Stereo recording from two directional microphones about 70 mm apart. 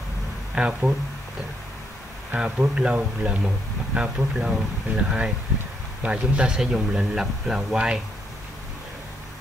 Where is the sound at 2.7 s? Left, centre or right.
Centre.